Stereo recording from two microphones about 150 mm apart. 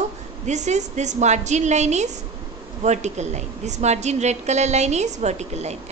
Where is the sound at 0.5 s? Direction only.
50° right (ahead or behind).